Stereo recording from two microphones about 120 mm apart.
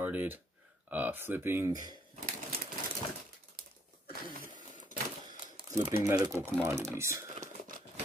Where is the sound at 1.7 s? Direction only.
35° right (ahead or behind).